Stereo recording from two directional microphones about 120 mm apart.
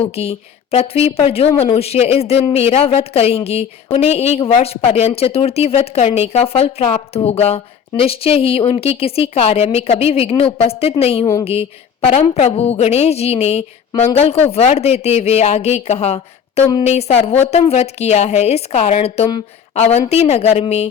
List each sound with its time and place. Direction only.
0.0 s speech: 55° left (ahead or behind)
12.1 s speech: 70° left (ahead or behind)